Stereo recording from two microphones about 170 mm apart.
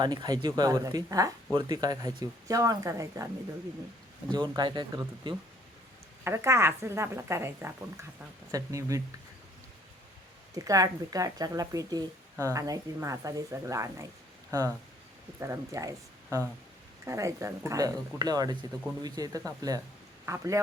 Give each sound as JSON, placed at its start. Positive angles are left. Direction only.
{"t": 0.0, "sound": "speech", "side_deg": -25}
{"t": 4.3, "sound": "a woman's voice", "side_deg": -25}
{"t": 10.5, "sound": "speech", "side_deg": -20}
{"t": 15.4, "sound": "a woman's voice", "side_deg": -15}